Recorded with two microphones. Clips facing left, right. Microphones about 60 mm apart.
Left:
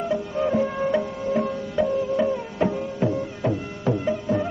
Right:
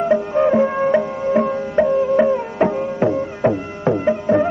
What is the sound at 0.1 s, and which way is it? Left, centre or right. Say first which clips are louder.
Music: right 8 dB; right.